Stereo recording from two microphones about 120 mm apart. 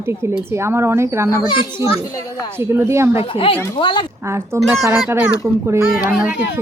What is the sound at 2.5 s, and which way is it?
Speech, 20° right (ahead or behind).